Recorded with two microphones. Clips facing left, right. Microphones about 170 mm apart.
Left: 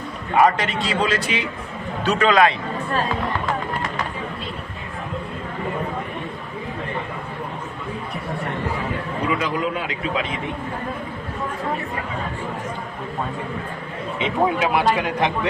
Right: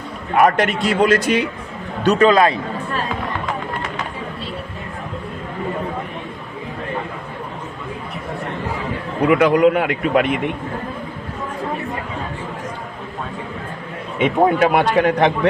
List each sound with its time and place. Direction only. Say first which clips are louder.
0.3 s a man's voice: right 2 dB; 55° right (ahead or behind)
2.1 s a man's voice: right 3 dB; 35° right (ahead or behind)
9.3 s a man's voice: right 12 dB; 65° right (ahead or behind)
14.2 s a man's voice: right 6 dB; 55° right (ahead or behind)